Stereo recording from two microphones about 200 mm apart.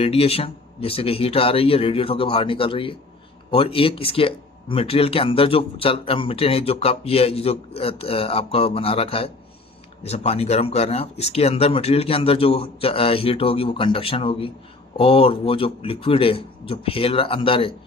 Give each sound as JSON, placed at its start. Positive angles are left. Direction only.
{"t": 0.0, "sound": "speech", "side_deg": 30}